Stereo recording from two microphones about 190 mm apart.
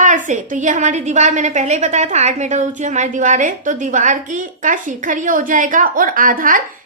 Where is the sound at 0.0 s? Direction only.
40° right (ahead or behind).